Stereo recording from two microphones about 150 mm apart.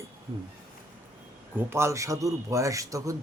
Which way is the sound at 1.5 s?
15° right (ahead or behind).